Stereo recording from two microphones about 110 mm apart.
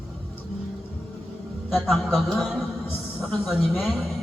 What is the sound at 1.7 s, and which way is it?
Speech, centre (ahead or behind).